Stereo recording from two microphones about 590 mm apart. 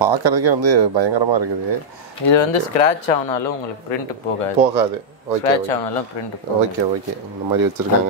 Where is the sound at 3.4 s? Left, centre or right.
Left.